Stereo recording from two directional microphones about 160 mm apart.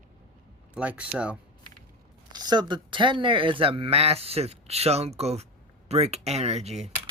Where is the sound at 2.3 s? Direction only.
25° right (ahead or behind); by 6.9 s 40° right (ahead or behind).